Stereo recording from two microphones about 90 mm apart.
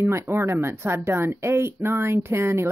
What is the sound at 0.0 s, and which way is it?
A woman's voice, 30° right (ahead or behind).